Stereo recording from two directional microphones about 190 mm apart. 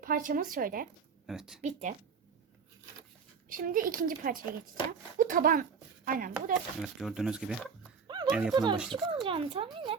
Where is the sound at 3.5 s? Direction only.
45° right (ahead or behind).